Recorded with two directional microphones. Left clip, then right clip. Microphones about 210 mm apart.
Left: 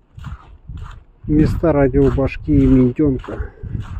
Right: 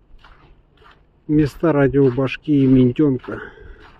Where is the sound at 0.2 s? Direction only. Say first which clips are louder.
Left 8 dB; 55° left (ahead or behind).